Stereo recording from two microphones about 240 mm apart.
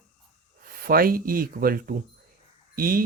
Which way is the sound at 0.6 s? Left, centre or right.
Right.